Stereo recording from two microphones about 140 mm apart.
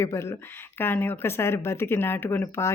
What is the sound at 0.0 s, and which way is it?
Speech, 20° left (ahead or behind).